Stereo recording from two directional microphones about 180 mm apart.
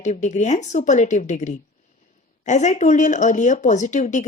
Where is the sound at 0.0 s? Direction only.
40° left (ahead or behind).